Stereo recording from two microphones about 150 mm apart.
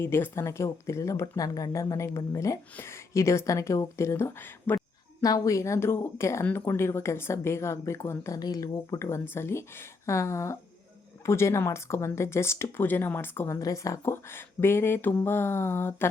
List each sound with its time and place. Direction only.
0.0 s speech: 15° left (ahead or behind)